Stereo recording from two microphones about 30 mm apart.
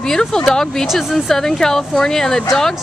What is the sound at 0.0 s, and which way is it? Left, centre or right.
Speech, centre.